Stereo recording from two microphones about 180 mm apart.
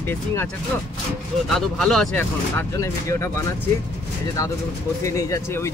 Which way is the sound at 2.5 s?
15° left (ahead or behind).